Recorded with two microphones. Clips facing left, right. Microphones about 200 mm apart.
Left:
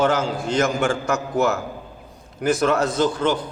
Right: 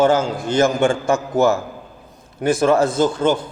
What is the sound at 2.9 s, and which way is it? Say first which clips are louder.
Speech: right 3 dB; 50° right (ahead or behind).